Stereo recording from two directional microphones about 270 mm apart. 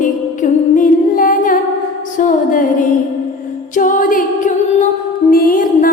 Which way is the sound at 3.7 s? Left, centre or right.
Left.